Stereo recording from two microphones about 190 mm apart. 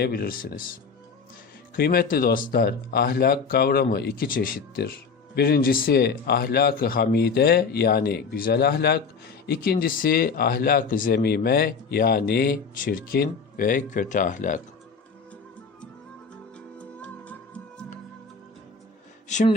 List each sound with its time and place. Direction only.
0.0 s speech: 55° left (ahead or behind)
1.7 s speech: 50° left (ahead or behind)
16.6 s music: 5° left (ahead or behind)